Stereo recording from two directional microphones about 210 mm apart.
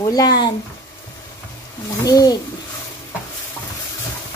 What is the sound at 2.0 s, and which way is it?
Speech, 15° left (ahead or behind).